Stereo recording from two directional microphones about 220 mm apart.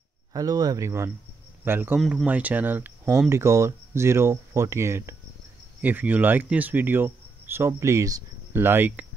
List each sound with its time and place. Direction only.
0.3 s speech: 15° right (ahead or behind)